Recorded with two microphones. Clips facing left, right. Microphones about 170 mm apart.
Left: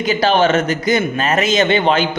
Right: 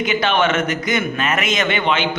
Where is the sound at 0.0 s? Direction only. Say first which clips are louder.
Left 4 dB; 35° left (ahead or behind).